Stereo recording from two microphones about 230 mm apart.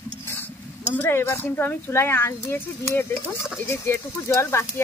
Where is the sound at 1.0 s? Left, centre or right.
Centre.